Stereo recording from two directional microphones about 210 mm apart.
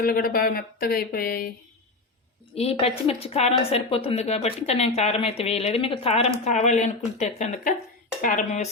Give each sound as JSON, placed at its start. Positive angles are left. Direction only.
{"t": 0.0, "sound": "speech", "side_deg": 45}
{"t": 2.6, "sound": "a woman's voice", "side_deg": 30}